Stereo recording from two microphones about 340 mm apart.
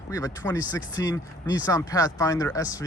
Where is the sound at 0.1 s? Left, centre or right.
Centre.